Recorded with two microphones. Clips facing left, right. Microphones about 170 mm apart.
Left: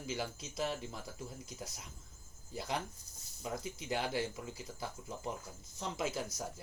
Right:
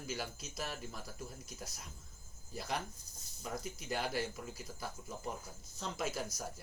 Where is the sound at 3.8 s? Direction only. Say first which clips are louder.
Left 1 dB; 20° left (ahead or behind).